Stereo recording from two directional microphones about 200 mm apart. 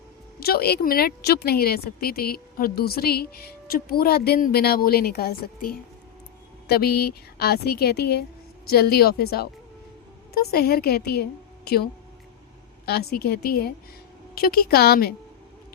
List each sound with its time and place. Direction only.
0.3 s speech: 50° left (ahead or behind)